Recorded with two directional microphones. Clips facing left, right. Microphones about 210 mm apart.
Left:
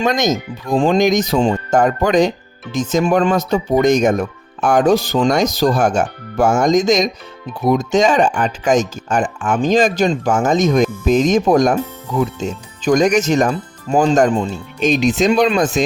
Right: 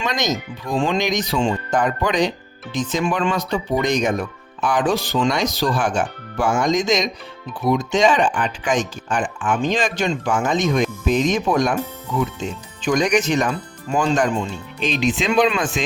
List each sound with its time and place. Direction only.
0.0 s speech: 45° left (ahead or behind)